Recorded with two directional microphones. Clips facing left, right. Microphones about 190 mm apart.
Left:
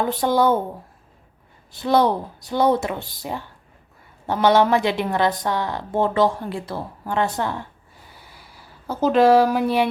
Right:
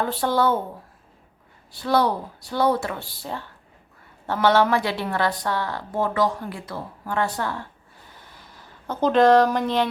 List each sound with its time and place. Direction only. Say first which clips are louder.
0.0 s speech: left 3 dB; 15° left (ahead or behind)
1.7 s a woman's voice: left 3 dB; 20° left (ahead or behind)
4.3 s a woman's voice: left 2 dB; 15° left (ahead or behind)
8.2 s a sound: even; 10° left (ahead or behind)